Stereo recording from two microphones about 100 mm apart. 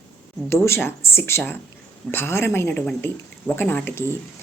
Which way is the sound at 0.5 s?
25° left (ahead or behind).